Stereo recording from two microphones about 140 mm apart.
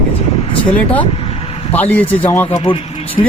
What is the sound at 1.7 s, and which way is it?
Speech, 10° left (ahead or behind).